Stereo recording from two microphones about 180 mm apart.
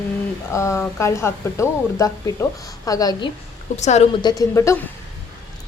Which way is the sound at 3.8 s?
40° left (ahead or behind).